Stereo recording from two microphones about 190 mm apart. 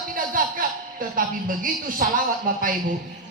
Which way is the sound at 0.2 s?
45° right (ahead or behind).